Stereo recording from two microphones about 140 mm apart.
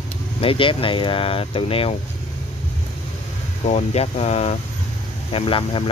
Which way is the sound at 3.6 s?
50° left (ahead or behind).